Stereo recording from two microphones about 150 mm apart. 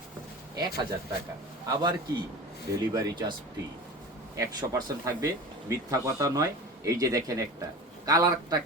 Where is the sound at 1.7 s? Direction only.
30° right (ahead or behind).